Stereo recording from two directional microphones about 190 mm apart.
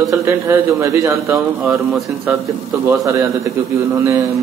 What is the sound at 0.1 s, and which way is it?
A man's voice, 15° right (ahead or behind).